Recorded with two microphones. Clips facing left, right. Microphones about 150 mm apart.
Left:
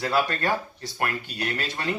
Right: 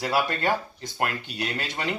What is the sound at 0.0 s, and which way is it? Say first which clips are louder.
Speech: even; 15° right (ahead or behind).